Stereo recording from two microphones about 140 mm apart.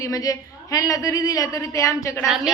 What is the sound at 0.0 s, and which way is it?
A woman's voice, 25° left (ahead or behind).